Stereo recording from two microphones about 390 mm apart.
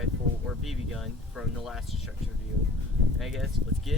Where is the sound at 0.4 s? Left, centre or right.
Centre.